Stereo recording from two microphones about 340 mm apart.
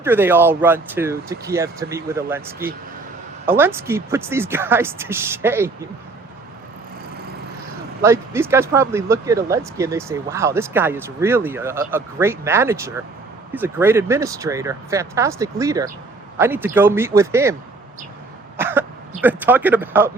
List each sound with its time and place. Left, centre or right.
0.0 s speech: centre
8.0 s speech: centre
18.5 s speech: centre